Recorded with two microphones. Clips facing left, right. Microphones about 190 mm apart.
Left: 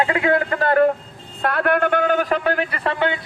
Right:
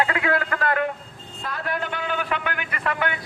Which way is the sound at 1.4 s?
65° left (ahead or behind).